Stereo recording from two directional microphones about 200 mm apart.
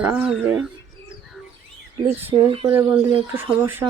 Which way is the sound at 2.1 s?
30° right (ahead or behind).